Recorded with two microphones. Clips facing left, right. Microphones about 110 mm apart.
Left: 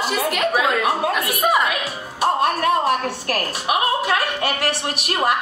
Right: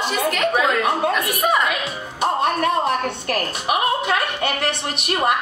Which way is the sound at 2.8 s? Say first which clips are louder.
Left 1 dB; 25° right (ahead or behind).